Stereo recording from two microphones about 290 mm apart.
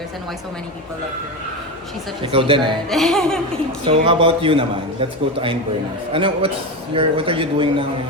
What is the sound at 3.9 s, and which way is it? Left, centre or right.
A man's voice, centre.